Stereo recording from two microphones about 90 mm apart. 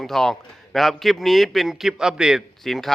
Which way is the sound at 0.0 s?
5° left (ahead or behind).